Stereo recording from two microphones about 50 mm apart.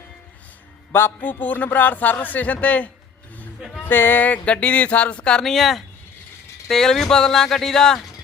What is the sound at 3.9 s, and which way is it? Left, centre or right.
Speech, left.